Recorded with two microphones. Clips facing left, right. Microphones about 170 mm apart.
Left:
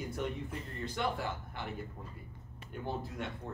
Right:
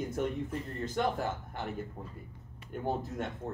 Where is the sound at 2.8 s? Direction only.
45° right (ahead or behind).